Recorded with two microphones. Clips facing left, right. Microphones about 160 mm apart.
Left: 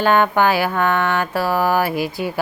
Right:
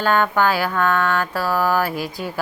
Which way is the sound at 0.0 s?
15° left (ahead or behind).